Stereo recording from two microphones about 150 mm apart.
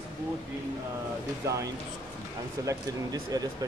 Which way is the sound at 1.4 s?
20° right (ahead or behind).